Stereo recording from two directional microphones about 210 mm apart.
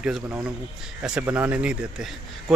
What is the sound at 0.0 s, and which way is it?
A man's voice, 5° right (ahead or behind).